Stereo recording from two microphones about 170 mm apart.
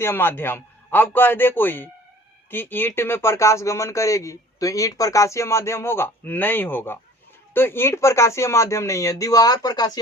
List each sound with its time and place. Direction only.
0.0 s speech: 15° left (ahead or behind)